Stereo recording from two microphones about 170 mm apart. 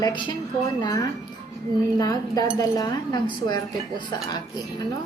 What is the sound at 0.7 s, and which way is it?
Speech, 20° left (ahead or behind).